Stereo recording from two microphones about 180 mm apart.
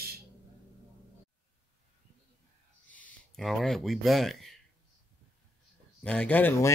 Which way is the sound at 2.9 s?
5° left (ahead or behind).